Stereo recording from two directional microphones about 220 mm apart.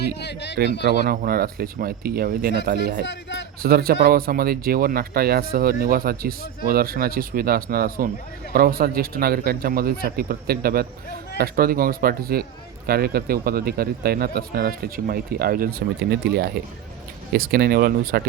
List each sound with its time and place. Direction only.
0.0 s speech: 50° left (ahead or behind)
1.0 s speech: 40° right (ahead or behind)
3.1 s speech: 50° left (ahead or behind)
3.6 s speech: 45° right (ahead or behind)